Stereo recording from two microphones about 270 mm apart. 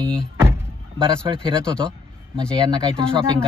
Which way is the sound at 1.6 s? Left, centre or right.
Centre.